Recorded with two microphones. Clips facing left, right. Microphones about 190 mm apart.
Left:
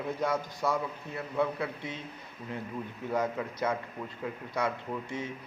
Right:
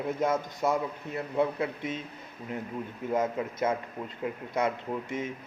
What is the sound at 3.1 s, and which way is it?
A man's voice, 20° right (ahead or behind).